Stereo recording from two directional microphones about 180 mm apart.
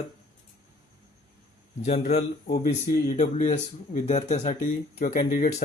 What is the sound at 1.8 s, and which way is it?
Speech, 40° left (ahead or behind).